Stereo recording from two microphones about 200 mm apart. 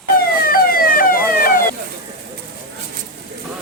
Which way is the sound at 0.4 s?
45° left (ahead or behind).